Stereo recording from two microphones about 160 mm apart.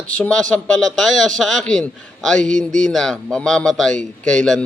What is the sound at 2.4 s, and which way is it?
Speech, 50° right (ahead or behind).